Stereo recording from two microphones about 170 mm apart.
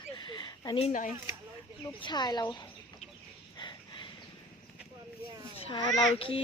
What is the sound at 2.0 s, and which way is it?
Speech, 25° left (ahead or behind).